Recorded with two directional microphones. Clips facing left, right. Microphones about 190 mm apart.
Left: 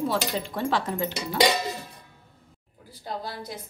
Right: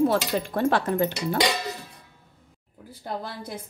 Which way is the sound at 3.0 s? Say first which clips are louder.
Right 1 dB; 55° right (ahead or behind).